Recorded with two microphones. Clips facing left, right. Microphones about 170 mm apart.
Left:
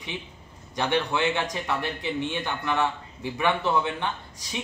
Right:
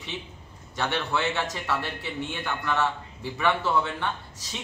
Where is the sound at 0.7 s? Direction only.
15° left (ahead or behind).